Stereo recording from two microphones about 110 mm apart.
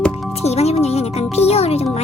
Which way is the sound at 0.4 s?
75° left (ahead or behind).